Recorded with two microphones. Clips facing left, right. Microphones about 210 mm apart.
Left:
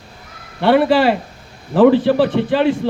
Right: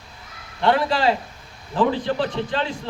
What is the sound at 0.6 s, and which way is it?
A man's voice, 60° left (ahead or behind).